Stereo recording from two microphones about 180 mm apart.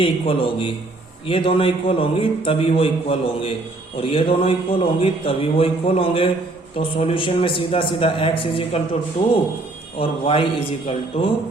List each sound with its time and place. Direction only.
0.0 s a man's voice: 30° left (ahead or behind)
10.0 s a man's voice: 30° left (ahead or behind)